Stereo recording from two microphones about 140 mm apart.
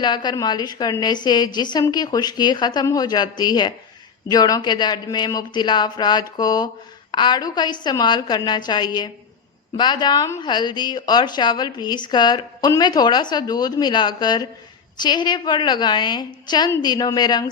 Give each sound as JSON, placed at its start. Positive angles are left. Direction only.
{"t": 0.0, "sound": "a woman's voice", "side_deg": 30}